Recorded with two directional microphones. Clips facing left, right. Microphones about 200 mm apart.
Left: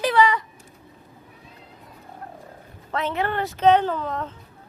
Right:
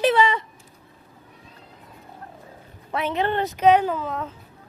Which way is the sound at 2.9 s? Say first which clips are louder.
Right 2 dB; 15° right (ahead or behind).